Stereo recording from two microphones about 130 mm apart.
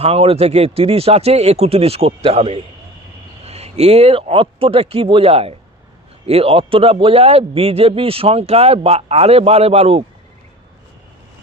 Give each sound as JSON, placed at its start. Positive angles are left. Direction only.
{"t": 0.0, "sound": "a man's voice", "side_deg": -50}